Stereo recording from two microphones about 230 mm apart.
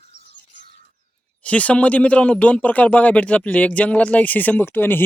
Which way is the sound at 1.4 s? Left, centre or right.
Centre.